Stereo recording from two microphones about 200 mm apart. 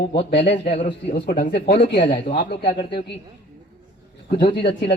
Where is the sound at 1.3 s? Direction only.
45° left (ahead or behind).